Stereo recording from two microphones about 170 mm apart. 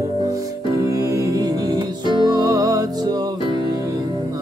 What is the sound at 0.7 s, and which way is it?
Music, 20° right (ahead or behind).